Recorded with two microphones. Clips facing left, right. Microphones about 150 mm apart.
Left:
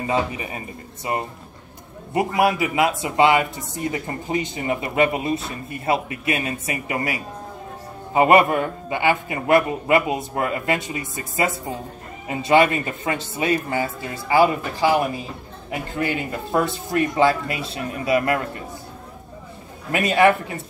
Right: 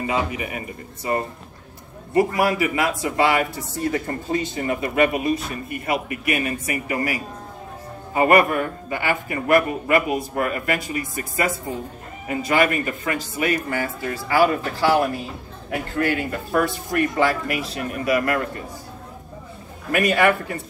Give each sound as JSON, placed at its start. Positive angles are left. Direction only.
{"t": 0.0, "sound": "a man's voice", "side_deg": 30}
{"t": 2.1, "sound": "speech", "side_deg": 20}
{"t": 19.9, "sound": "speech", "side_deg": 20}